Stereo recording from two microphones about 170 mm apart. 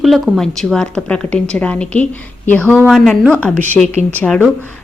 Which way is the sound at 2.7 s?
5° right (ahead or behind).